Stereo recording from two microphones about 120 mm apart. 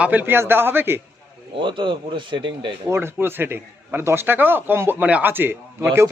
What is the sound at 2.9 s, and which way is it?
Speech, 20° right (ahead or behind).